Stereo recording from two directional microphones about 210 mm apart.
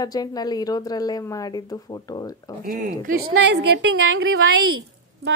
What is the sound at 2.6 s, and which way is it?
Speech, 40° right (ahead or behind).